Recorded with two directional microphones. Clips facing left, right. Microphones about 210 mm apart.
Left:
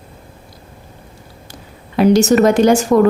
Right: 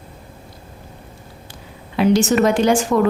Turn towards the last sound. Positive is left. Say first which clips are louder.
# left 5 dB
turn(degrees=45)  # may be behind; listen again after turning